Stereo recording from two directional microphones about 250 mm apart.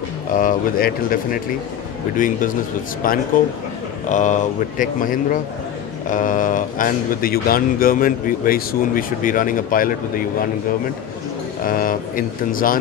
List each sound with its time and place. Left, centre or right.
0.4 s speech: left
11.6 s a man's voice: left